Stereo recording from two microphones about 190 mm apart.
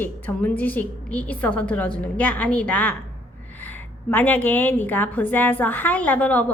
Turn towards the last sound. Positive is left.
turn(degrees=10)  # may be behind; listen again after turning